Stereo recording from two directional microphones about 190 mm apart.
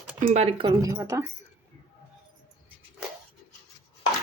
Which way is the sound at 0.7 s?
15° right (ahead or behind).